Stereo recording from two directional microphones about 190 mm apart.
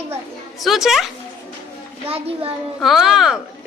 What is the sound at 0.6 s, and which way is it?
Speech, centre (ahead or behind).